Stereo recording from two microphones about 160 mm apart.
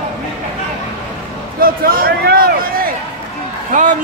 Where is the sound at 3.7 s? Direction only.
55° right (ahead or behind).